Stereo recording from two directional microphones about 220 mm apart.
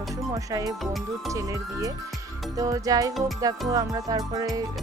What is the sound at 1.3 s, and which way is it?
Music, 15° right (ahead or behind).